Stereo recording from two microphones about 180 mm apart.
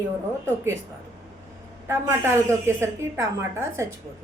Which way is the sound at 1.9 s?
15° right (ahead or behind).